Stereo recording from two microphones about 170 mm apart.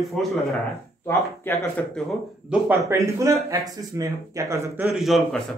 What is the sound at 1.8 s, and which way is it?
Speech, 10° left (ahead or behind).